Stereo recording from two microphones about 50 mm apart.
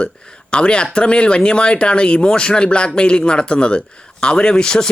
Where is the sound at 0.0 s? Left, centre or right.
Left.